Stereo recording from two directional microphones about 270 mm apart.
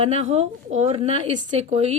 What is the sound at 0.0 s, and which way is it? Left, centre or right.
Speech, right.